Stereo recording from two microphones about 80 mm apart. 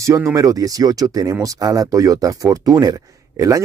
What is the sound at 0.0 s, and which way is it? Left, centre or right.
Speech, right.